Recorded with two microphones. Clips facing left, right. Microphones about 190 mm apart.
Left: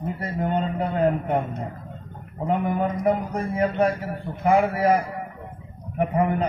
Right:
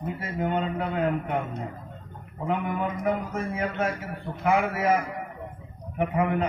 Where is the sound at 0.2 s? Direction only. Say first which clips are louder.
Left 2 dB; 40° left (ahead or behind).